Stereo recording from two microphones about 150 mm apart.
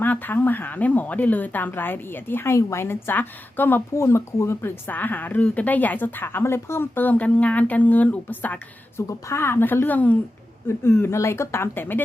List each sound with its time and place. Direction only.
0.0 s speech: 10° left (ahead or behind)